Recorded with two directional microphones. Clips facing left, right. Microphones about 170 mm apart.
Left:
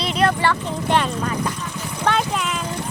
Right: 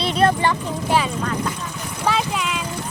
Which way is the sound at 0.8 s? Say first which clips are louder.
Even; 5° right (ahead or behind).